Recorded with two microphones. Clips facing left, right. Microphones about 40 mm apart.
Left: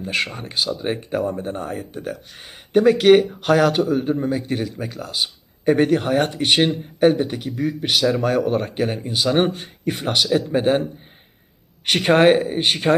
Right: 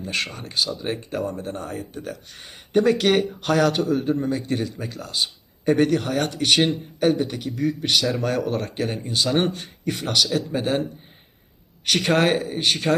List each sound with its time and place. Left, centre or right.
0.0 s speech: centre
11.9 s speech: left